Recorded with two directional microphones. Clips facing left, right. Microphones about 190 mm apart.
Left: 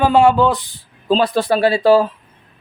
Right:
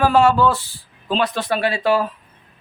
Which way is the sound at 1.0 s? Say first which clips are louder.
Left 6 dB; 35° left (ahead or behind).